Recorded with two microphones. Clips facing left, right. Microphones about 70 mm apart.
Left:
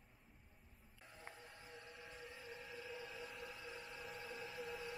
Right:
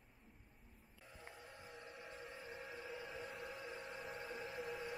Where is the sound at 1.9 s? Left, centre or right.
Centre.